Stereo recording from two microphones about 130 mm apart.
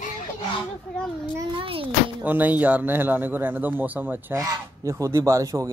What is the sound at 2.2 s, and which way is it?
A man's voice, 15° right (ahead or behind).